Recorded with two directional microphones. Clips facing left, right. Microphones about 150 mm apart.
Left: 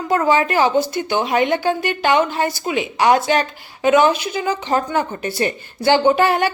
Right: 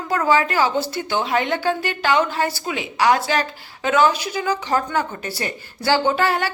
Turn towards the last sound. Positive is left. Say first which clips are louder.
# left 5 dB
turn(degrees=20)  # may be behind; listen again after turning